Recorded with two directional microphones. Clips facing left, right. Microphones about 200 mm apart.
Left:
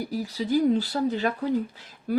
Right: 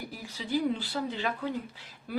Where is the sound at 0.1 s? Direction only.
40° left (ahead or behind).